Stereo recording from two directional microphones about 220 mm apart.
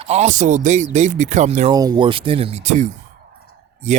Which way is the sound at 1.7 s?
20° right (ahead or behind).